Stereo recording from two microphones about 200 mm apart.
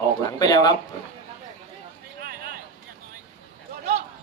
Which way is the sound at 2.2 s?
50° right (ahead or behind).